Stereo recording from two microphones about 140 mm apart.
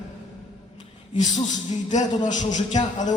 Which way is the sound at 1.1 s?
60° left (ahead or behind).